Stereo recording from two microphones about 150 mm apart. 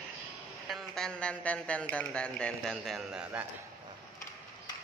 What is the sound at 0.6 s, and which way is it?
A man's voice, centre (ahead or behind).